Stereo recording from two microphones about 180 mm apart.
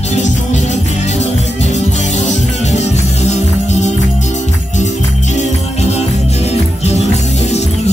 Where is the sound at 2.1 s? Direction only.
40° left (ahead or behind).